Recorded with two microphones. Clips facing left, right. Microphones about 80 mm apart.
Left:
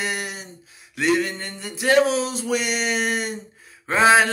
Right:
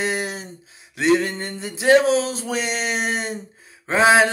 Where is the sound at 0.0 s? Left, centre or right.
Right.